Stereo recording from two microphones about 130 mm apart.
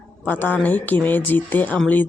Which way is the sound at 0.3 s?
15° left (ahead or behind).